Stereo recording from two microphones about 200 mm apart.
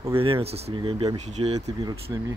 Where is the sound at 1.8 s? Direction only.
20° right (ahead or behind).